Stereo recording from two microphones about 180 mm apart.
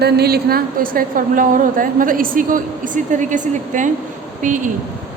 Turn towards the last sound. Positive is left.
turn(degrees=-45)  # may be behind; listen again after turning